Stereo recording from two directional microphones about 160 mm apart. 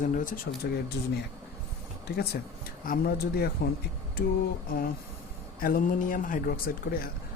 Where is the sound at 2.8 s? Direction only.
65° left (ahead or behind).